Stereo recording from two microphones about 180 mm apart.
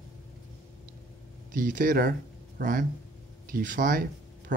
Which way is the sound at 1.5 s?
50° right (ahead or behind).